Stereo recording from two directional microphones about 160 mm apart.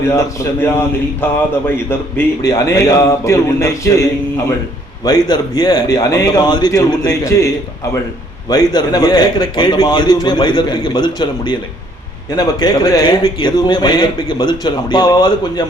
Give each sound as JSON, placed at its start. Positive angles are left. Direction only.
{"t": 0.1, "sound": "a man's voice", "side_deg": 20}
{"t": 8.4, "sound": "a man's voice", "side_deg": 25}